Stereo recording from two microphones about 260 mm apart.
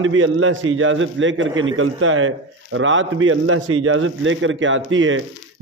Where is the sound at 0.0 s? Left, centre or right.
Right.